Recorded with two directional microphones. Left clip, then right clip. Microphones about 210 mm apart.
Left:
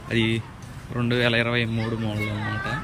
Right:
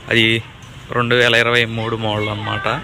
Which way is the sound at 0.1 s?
10° left (ahead or behind).